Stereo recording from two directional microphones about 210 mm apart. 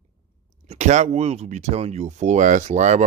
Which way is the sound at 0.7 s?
35° right (ahead or behind).